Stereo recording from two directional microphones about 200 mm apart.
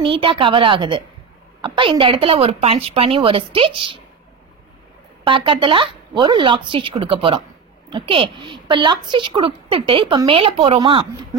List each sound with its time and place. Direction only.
0.0 s a woman's voice: 25° right (ahead or behind)
5.2 s a woman's voice: 25° right (ahead or behind)